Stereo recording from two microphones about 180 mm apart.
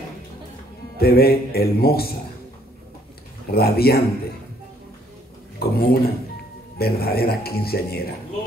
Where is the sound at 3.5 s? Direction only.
60° left (ahead or behind).